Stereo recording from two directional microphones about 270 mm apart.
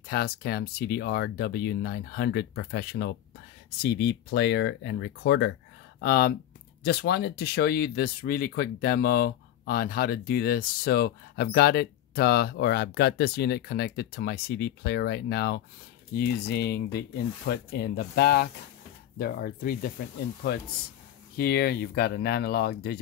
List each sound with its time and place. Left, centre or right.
0.0 s speech: left
21.4 s speech: left